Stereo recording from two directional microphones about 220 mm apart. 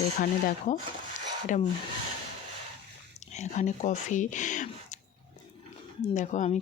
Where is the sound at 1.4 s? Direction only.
35° left (ahead or behind).